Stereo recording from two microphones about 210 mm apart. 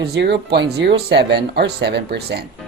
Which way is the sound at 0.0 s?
55° right (ahead or behind).